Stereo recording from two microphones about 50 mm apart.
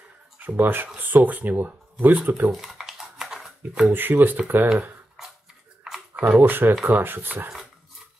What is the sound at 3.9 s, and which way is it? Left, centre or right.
Speech, right.